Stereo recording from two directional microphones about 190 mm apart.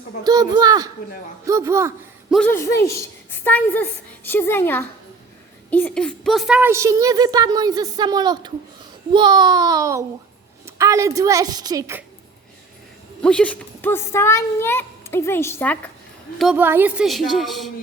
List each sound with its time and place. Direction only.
0.3 s a woman's voice: 20° right (ahead or behind)
2.3 s a woman's voice: 10° left (ahead or behind); by 12.0 s 15° right (ahead or behind)
13.2 s a woman's voice: 5° left (ahead or behind)
16.4 s a woman's voice: 5° right (ahead or behind)